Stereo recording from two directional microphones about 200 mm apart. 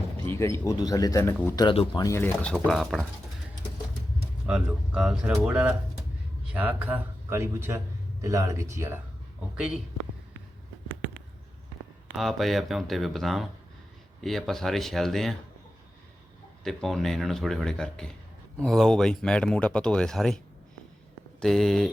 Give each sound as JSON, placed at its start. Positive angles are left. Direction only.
{"t": 0.3, "sound": "speech", "side_deg": 15}
{"t": 1.6, "sound": "speech", "side_deg": 25}
{"t": 4.4, "sound": "speech", "side_deg": -5}
{"t": 12.1, "sound": "speech", "side_deg": 0}
{"t": 16.6, "sound": "speech", "side_deg": 0}
{"t": 21.4, "sound": "speech", "side_deg": 0}